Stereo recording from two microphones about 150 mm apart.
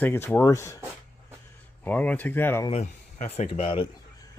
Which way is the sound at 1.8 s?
10° left (ahead or behind).